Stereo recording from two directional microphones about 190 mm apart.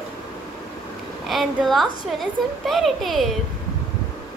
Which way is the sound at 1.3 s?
Centre (ahead or behind).